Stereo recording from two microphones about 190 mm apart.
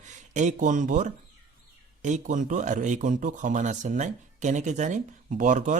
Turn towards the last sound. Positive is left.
turn(degrees=-40)  # may be behind; listen again after turning